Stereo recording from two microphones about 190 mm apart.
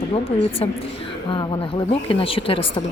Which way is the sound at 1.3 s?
25° left (ahead or behind).